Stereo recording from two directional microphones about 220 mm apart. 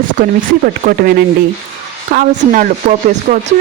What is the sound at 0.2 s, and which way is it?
A woman's voice, 40° right (ahead or behind).